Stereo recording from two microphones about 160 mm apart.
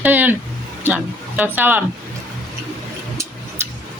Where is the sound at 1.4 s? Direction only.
10° right (ahead or behind).